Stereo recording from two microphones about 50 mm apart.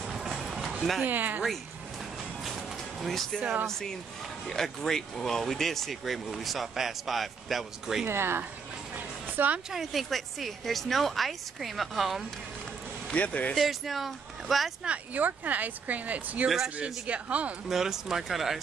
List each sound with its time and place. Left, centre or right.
0.0 s a sound: centre
1.0 s speech: right
2.4 s a sound: centre
3.6 s speech: centre
8.1 s speech: right
8.9 s music: right
9.7 s speech: centre
13.1 s speech: left
13.6 s speech: centre
15.1 s speech: right
16.4 s speech: centre
17.0 s speech: right
17.6 s speech: centre